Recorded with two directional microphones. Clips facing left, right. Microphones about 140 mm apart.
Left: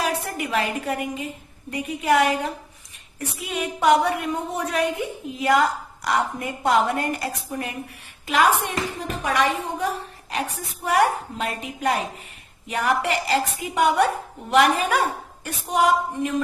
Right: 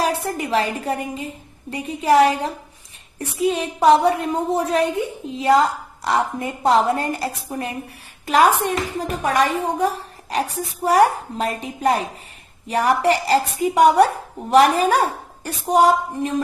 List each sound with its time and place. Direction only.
0.0 s a woman's voice: 35° right (ahead or behind)